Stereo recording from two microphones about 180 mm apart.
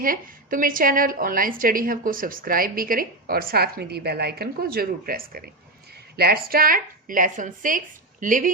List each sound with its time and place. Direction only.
0.0 s a woman's voice: 50° right (ahead or behind)